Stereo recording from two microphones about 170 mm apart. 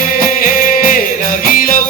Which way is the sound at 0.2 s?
55° left (ahead or behind).